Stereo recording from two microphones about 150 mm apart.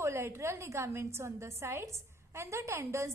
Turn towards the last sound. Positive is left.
turn(degrees=-20)  # may be behind; listen again after turning